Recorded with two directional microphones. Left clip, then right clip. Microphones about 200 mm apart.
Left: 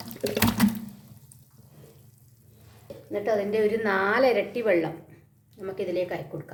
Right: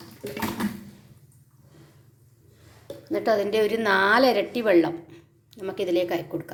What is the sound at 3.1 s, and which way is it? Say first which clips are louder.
A woman's voice: right 3 dB; 30° right (ahead or behind).